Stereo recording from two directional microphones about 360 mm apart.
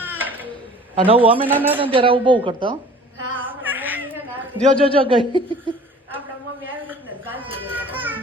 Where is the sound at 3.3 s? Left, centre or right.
Centre.